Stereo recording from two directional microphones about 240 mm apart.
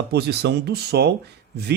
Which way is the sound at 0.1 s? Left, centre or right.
Right.